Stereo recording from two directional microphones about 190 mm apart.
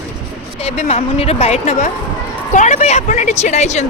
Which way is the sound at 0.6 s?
35° left (ahead or behind).